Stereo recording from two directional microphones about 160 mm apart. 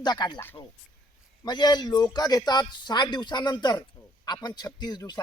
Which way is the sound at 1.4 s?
25° left (ahead or behind).